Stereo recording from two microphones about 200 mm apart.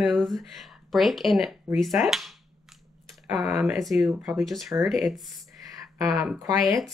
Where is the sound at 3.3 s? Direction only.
5° right (ahead or behind).